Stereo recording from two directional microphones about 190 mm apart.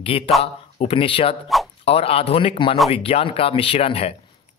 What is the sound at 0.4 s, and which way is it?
Speech, 30° left (ahead or behind).